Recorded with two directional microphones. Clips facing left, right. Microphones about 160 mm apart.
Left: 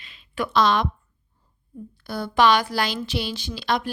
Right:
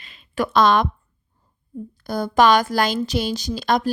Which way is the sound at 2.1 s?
45° right (ahead or behind).